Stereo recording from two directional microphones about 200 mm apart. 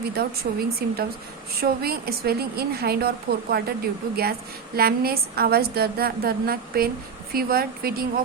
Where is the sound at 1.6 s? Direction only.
50° right (ahead or behind).